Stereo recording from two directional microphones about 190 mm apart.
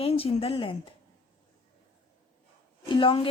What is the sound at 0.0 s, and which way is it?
Speech, 30° left (ahead or behind).